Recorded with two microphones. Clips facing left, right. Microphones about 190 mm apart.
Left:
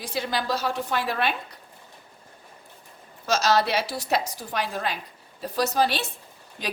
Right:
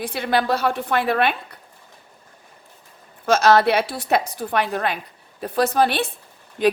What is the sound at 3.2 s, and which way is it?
A woman's voice, 55° right (ahead or behind).